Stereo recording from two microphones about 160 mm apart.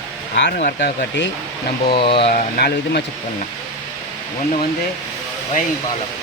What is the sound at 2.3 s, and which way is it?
Speech, 80° left.